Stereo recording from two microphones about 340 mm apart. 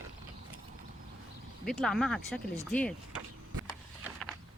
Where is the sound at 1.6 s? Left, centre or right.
Centre.